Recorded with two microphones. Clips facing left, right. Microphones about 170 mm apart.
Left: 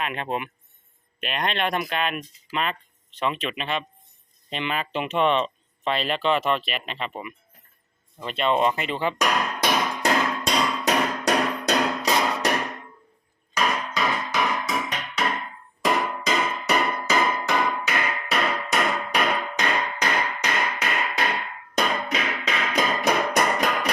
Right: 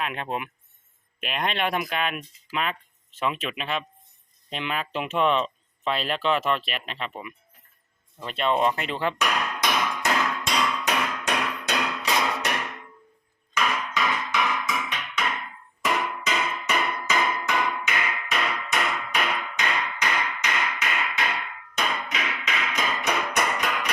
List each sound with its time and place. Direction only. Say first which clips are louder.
0.0 s speech: left 2 dB; centre (ahead or behind)
9.1 s music: left 3 dB; 35° left (ahead or behind)